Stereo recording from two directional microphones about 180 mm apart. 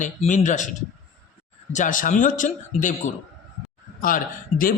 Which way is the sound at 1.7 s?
45° left (ahead or behind).